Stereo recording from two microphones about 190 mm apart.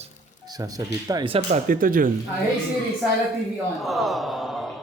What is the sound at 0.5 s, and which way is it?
Speech, 20° right (ahead or behind).